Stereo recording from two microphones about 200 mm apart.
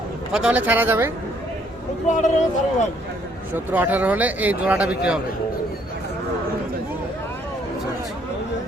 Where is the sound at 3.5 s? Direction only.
10° right (ahead or behind).